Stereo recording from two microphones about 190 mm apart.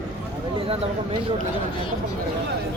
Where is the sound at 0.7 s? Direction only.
30° right (ahead or behind).